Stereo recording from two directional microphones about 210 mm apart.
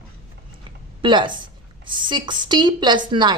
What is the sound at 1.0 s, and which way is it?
A woman's voice, 20° right (ahead or behind).